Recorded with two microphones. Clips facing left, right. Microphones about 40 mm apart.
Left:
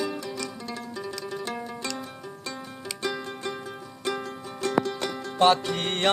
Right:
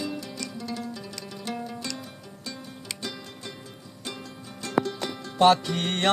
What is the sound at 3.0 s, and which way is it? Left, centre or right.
Music, left.